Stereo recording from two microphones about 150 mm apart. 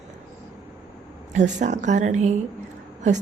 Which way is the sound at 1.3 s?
55° right (ahead or behind).